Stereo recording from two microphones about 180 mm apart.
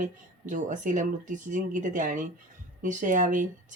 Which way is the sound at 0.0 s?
45° right (ahead or behind).